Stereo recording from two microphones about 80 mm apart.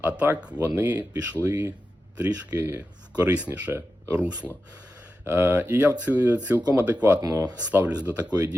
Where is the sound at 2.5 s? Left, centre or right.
Right.